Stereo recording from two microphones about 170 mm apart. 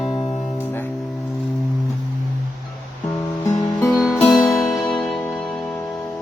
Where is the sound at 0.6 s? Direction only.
10° left (ahead or behind).